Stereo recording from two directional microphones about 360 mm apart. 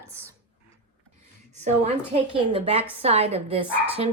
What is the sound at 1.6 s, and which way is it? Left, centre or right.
A woman's voice, centre.